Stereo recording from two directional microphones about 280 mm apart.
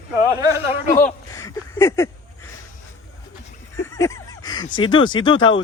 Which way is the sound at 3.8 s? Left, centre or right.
Centre.